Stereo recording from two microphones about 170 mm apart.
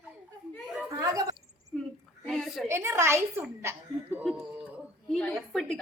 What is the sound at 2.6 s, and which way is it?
A child's voice, 15° right (ahead or behind).